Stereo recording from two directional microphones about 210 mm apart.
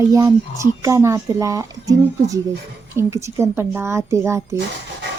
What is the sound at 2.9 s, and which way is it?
Speech, 15° right (ahead or behind).